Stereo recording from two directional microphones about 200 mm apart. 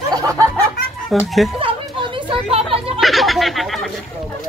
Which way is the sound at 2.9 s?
Centre (ahead or behind).